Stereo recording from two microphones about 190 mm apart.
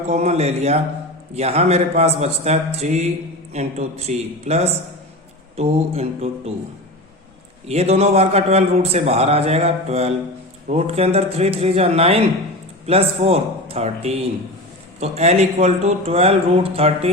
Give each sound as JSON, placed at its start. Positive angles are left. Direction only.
{"t": 0.1, "sound": "a man's voice", "side_deg": -35}
{"t": 7.7, "sound": "a man's voice", "side_deg": -35}